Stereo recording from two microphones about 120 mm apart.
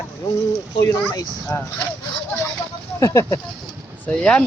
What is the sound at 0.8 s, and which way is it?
Speech, 30° left (ahead or behind).